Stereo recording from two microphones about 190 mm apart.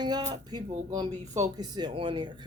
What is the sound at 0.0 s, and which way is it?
Speech, 20° right (ahead or behind).